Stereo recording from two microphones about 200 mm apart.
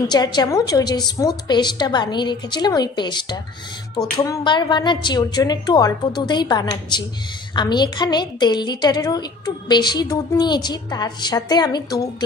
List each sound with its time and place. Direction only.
0.1 s a woman's voice: 20° left (ahead or behind)